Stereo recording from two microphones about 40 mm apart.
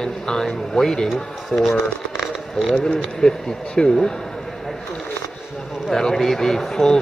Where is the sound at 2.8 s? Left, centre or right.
Left.